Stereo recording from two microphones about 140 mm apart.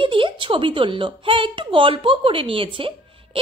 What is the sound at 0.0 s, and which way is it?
Speech, 40° right (ahead or behind).